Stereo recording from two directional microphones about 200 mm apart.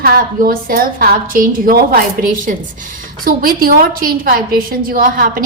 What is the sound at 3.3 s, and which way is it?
A woman's voice, 45° right (ahead or behind).